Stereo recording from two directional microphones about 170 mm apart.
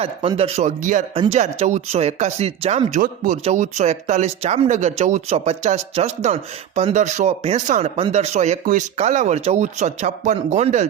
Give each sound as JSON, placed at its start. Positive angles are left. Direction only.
{"t": 0.0, "sound": "speech", "side_deg": -35}
{"t": 0.8, "sound": "speech", "side_deg": -50}
{"t": 1.1, "sound": "speech", "side_deg": -35}